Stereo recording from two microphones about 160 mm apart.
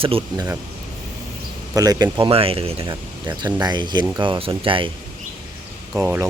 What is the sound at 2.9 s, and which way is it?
Speech, 25° right (ahead or behind).